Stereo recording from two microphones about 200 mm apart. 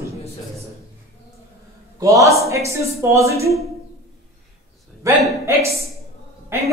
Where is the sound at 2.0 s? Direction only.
15° right (ahead or behind).